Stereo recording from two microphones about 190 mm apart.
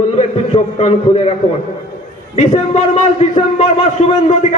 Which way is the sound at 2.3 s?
35° left (ahead or behind).